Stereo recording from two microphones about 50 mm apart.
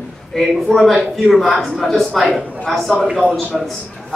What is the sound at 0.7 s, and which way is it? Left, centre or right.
A man's voice, centre.